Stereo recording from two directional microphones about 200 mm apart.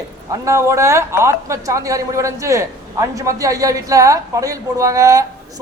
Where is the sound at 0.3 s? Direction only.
15° right (ahead or behind).